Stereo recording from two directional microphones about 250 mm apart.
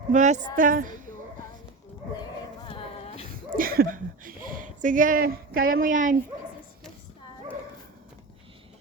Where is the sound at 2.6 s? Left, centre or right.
Left.